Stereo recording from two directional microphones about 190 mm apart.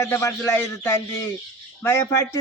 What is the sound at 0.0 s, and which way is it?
Speech, 15° left (ahead or behind).